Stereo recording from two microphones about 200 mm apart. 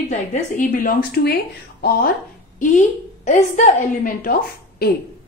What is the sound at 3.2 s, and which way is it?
A woman's voice, 35° left (ahead or behind).